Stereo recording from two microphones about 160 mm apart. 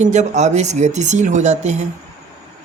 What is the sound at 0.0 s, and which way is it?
Speech, 45° right (ahead or behind).